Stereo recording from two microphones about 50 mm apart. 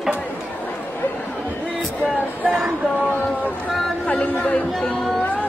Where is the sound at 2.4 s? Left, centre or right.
Right.